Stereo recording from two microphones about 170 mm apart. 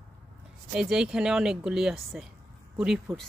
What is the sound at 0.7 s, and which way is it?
Speech, 5° right (ahead or behind).